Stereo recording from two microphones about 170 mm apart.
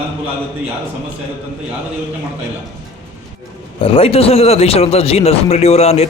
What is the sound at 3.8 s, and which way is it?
Speech, 35° left (ahead or behind).